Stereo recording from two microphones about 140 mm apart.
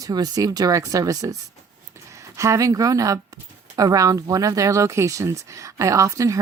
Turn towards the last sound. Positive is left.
turn(degrees=-25)  # may be behind; listen again after turning